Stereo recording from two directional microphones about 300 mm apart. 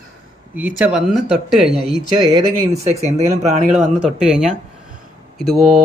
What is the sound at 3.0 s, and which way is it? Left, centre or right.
Speech, right.